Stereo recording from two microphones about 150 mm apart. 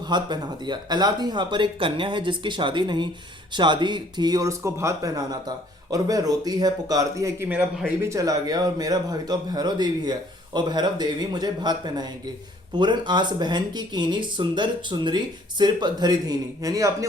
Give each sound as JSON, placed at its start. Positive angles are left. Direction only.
{"t": 0.1, "sound": "speech", "side_deg": -30}